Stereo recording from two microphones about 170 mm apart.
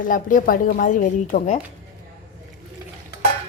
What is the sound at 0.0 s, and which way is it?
A woman's voice, 50° left (ahead or behind).